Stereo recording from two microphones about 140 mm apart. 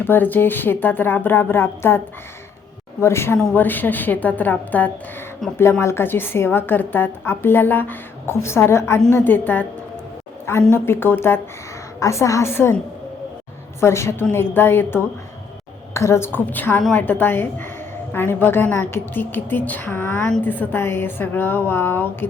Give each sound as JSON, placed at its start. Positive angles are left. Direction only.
{"t": 0.0, "sound": "a woman's voice", "side_deg": 15}
{"t": 3.0, "sound": "a woman's voice", "side_deg": 20}
{"t": 10.7, "sound": "a woman's voice", "side_deg": 15}